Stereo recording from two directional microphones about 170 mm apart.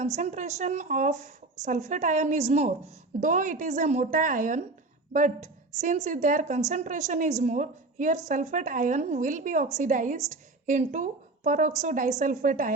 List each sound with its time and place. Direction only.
0.0 s a woman's voice: 40° right (ahead or behind)